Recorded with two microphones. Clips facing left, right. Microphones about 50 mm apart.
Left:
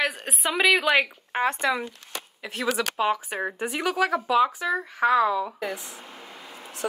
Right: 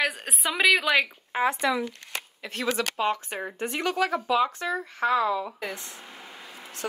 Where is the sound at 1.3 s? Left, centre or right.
Left.